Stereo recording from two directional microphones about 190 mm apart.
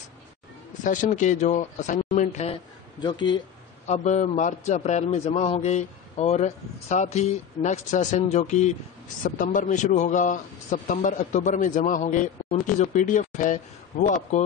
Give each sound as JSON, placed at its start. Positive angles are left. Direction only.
{"t": 0.8, "sound": "a man's voice", "side_deg": 40}
{"t": 3.8, "sound": "a man's voice", "side_deg": 35}